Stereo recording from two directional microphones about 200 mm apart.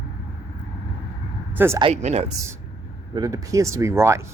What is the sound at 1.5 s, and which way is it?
Speech, 10° right (ahead or behind).